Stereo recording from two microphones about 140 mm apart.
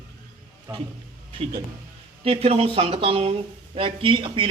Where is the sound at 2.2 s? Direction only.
45° right (ahead or behind).